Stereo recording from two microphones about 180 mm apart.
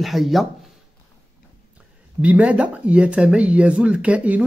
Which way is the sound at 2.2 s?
5° right (ahead or behind).